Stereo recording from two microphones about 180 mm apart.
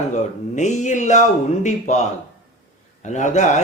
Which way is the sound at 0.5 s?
40° left (ahead or behind).